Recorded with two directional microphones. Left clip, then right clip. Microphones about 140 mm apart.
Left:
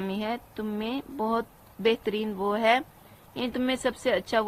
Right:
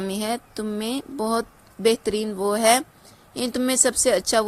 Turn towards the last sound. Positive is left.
turn(degrees=-55)  # may be behind; listen again after turning